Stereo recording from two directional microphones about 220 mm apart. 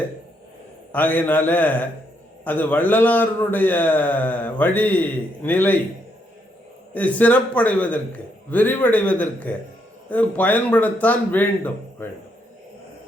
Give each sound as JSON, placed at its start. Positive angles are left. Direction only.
{"t": 0.9, "sound": "a man's voice", "side_deg": 10}
{"t": 6.9, "sound": "a man's voice", "side_deg": 5}